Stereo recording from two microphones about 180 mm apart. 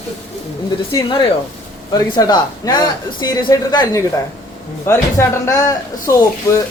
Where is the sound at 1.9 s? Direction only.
20° left (ahead or behind).